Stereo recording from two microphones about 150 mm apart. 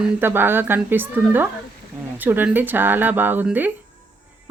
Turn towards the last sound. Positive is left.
turn(degrees=-10)  # may be behind; listen again after turning